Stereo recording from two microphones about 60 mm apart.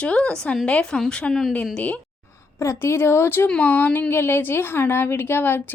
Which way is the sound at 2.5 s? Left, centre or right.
Left.